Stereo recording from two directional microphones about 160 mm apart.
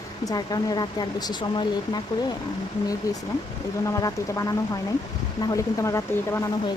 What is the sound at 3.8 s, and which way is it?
Speech, 20° left (ahead or behind).